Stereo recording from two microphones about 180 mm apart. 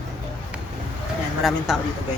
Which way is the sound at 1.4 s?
Centre (ahead or behind).